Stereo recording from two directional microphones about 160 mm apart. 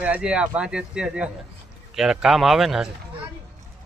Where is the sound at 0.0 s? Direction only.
5° right (ahead or behind).